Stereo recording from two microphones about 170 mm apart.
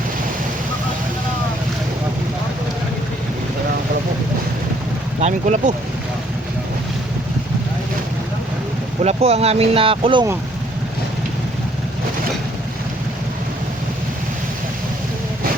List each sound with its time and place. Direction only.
5.2 s speech: 45° right (ahead or behind)
9.0 s speech: 35° right (ahead or behind)